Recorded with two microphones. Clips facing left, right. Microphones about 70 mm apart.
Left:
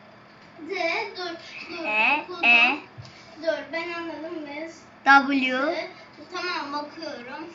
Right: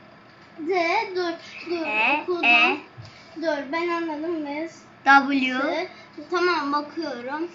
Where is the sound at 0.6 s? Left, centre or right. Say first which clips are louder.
Right 6 dB; right.